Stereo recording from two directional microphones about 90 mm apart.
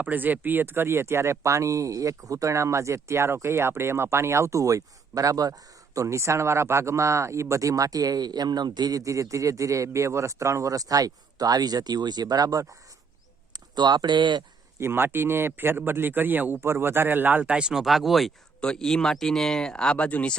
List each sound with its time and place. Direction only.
0.0 s speech: 20° right (ahead or behind); by 12.7 s 40° right (ahead or behind)
13.5 s speech: 50° right (ahead or behind)
14.8 s speech: 25° right (ahead or behind); by 20.3 s 15° left (ahead or behind)